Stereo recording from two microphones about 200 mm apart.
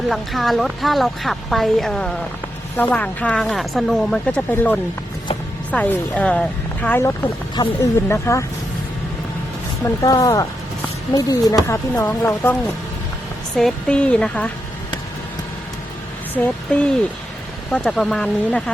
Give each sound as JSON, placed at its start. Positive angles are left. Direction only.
{"t": 0.1, "sound": "a woman's voice", "side_deg": 0}
{"t": 7.5, "sound": "speech", "side_deg": 20}
{"t": 9.8, "sound": "speech", "side_deg": 15}
{"t": 13.6, "sound": "a woman's voice", "side_deg": 5}
{"t": 16.4, "sound": "speech", "side_deg": 10}
{"t": 17.7, "sound": "a woman's voice", "side_deg": 5}